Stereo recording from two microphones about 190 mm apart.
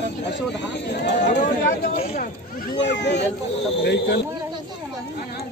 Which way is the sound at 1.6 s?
50° left (ahead or behind).